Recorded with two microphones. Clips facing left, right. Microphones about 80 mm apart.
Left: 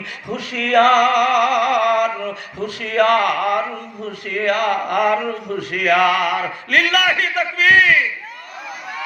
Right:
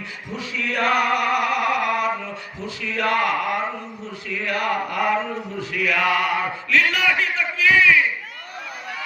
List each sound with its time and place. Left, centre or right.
0.3 s music: left
2.2 s a sound: left
4.0 s a man's voice: left